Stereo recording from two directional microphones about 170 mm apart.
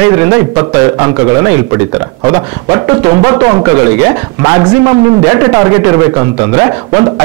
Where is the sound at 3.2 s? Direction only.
20° right (ahead or behind).